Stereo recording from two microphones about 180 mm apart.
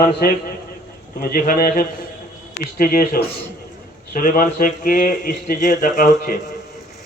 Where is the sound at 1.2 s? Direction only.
50° left (ahead or behind).